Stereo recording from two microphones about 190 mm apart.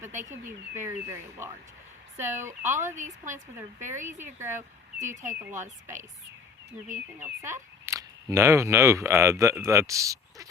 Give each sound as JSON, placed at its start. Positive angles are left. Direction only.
{"t": 0.1, "sound": "speech", "side_deg": -40}
{"t": 0.4, "sound": "speech", "side_deg": -15}
{"t": 2.8, "sound": "speech", "side_deg": -40}
{"t": 4.4, "sound": "speech", "side_deg": -15}
{"t": 6.9, "sound": "speech", "side_deg": -10}